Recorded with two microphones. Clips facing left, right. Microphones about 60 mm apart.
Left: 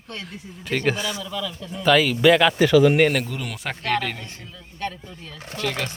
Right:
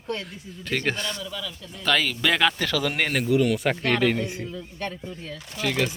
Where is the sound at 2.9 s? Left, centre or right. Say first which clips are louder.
Left 2 dB; centre.